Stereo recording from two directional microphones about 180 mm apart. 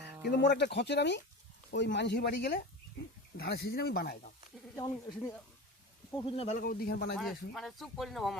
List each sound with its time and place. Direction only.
0.3 s speech: 70° left (ahead or behind)
4.8 s speech: 15° left (ahead or behind); by 6.6 s 35° left (ahead or behind)
6.6 s speech: 55° left (ahead or behind)
7.2 s speech: centre (ahead or behind)